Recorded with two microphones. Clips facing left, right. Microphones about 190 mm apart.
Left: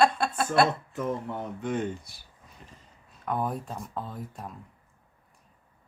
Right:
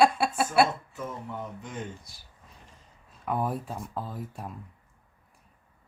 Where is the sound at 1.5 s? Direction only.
60° left (ahead or behind).